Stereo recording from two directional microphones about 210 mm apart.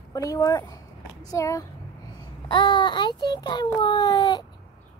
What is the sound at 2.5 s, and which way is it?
A child's voice, 20° left (ahead or behind).